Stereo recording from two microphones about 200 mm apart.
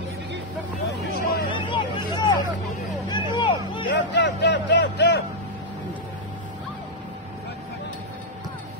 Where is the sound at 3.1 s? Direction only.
20° left (ahead or behind).